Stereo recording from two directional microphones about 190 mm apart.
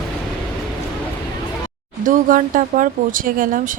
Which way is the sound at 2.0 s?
45° right (ahead or behind).